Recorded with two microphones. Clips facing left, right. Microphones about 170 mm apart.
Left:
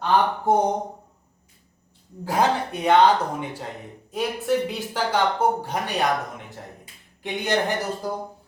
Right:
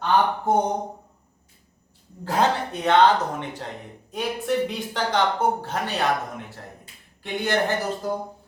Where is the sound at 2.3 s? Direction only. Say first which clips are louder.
Even; 10° left (ahead or behind).